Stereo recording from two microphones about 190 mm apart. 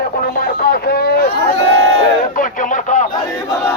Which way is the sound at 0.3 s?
50° left (ahead or behind).